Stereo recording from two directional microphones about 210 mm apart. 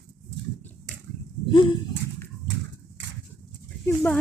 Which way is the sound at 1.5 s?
25° left (ahead or behind).